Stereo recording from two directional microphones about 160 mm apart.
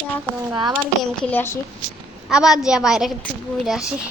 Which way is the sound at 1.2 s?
10° left (ahead or behind).